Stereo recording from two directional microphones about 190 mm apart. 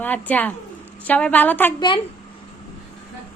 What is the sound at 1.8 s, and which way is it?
Speech, 25° left (ahead or behind).